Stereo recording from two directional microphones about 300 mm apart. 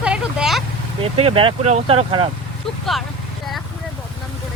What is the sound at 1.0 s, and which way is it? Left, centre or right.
Speech, centre.